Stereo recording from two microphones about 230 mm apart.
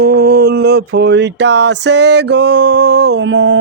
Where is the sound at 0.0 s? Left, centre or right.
Right.